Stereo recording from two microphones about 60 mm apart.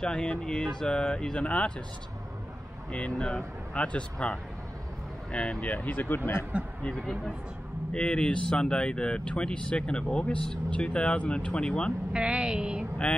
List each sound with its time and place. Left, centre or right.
0.0 s speech: centre
2.9 s speech: centre
5.9 s speech: left
7.0 s speech: centre
12.1 s a woman's voice: centre
13.0 s speech: centre